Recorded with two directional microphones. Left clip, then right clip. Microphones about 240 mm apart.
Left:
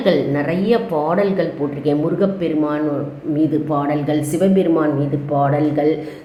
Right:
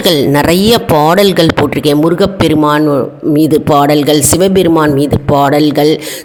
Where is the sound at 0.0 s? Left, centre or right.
Right.